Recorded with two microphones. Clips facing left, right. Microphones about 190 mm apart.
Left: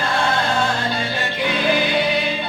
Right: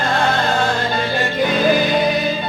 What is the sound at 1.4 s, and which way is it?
Music, 45° right (ahead or behind).